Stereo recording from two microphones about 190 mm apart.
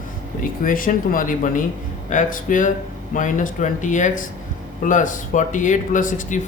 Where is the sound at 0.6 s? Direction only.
45° left (ahead or behind).